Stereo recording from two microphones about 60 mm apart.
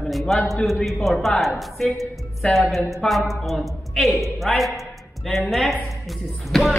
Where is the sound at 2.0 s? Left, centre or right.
Centre.